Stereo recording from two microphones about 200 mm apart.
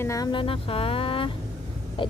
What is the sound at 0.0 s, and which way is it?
Speech, 15° left (ahead or behind).